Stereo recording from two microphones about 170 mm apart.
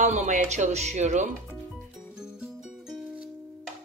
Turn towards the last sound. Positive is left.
turn(degrees=0)  # may be behind; listen again after turning